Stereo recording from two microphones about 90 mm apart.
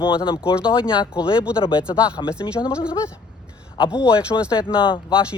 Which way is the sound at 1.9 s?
50° left (ahead or behind).